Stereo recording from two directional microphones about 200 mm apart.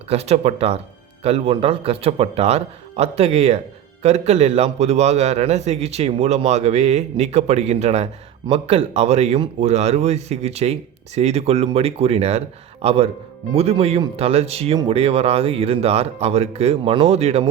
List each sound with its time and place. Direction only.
0.1 s a man's voice: 30° right (ahead or behind)